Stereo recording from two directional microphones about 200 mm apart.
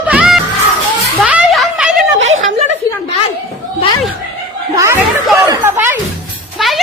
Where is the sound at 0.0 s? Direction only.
5° right (ahead or behind).